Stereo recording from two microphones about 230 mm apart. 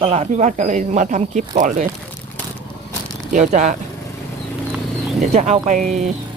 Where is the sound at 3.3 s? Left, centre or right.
Right.